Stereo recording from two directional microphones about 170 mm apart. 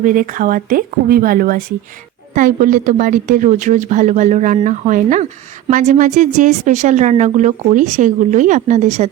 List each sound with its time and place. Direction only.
0.0 s a woman's voice: 50° right (ahead or behind)